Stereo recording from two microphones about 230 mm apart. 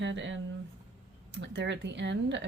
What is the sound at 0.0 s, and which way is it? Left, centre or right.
Speech, right.